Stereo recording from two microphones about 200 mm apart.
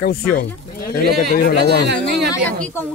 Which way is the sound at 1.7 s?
55° right (ahead or behind).